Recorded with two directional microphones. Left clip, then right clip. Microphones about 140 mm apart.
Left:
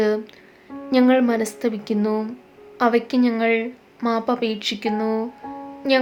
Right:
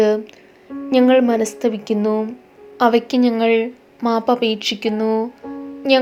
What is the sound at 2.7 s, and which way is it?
A woman's voice, 20° right (ahead or behind).